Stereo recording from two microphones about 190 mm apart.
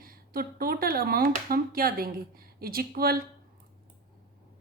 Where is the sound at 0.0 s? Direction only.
50° right (ahead or behind).